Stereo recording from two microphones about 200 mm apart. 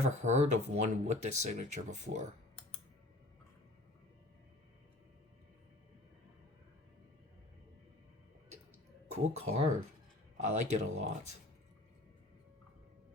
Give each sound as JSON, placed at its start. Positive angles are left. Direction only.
{"t": 0.0, "sound": "speech", "side_deg": -35}
{"t": 9.1, "sound": "speech", "side_deg": -35}